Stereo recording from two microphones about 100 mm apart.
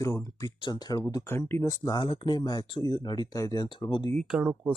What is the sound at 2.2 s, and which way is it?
Speech, 45° left (ahead or behind).